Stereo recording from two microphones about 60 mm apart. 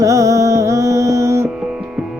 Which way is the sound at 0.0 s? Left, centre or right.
Right.